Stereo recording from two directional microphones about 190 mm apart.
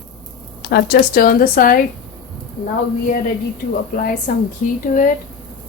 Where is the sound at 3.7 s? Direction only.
50° left (ahead or behind).